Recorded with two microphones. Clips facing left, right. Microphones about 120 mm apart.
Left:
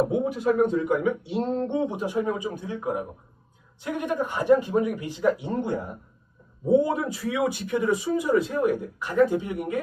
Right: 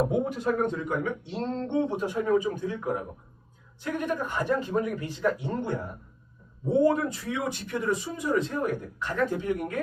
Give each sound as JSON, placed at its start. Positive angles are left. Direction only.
{"t": 0.1, "sound": "speech", "side_deg": 5}
{"t": 6.8, "sound": "speech", "side_deg": 10}